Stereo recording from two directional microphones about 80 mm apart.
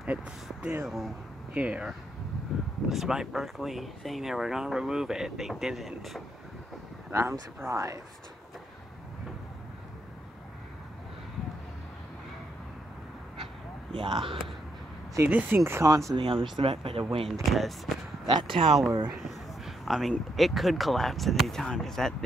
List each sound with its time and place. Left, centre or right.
0.0 s speech: centre
0.8 s speech: centre
1.5 s speech: centre
2.5 s a sound: centre
2.9 s speech: centre
7.1 s speech: right
13.9 s speech: right
15.2 s speech: right
15.8 s speech: right
16.2 s speech: right
17.0 s speech: centre
18.2 s speech: right
19.1 s speech: centre